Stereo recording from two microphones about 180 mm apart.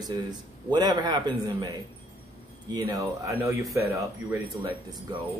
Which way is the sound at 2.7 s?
20° right (ahead or behind).